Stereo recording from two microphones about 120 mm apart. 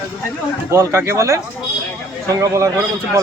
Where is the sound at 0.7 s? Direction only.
20° right (ahead or behind).